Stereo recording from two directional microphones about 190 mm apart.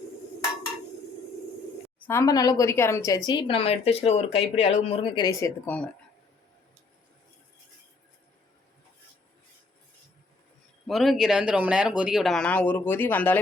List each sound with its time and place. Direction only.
2.0 s a woman's voice: 10° left (ahead or behind)
10.8 s speech: centre (ahead or behind)